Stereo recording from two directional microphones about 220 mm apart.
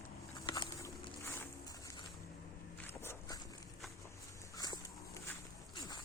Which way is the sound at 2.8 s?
10° left (ahead or behind).